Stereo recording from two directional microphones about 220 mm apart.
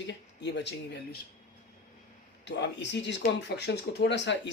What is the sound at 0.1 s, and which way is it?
Speech, 50° left (ahead or behind).